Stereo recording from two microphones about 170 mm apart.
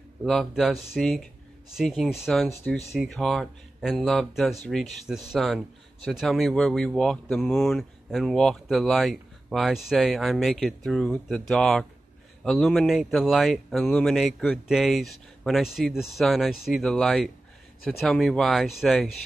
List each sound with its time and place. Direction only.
0.2 s speech: centre (ahead or behind)